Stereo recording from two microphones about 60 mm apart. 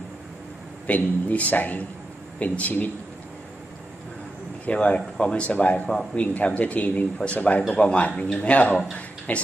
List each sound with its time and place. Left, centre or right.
0.8 s a man's voice: left
4.6 s a man's voice: centre